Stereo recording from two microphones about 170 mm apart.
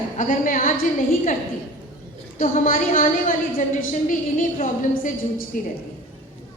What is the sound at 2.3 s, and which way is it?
A woman's voice, 50° left (ahead or behind).